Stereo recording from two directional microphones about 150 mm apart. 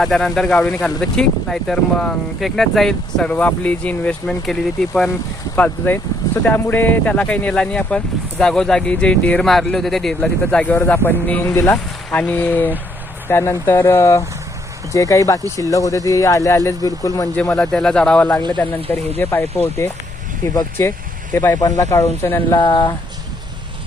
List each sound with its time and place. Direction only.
0.0 s speech: 5° left (ahead or behind); by 17.2 s 25° left (ahead or behind)
17.6 s speech: 5° left (ahead or behind); by 23.0 s 30° left (ahead or behind)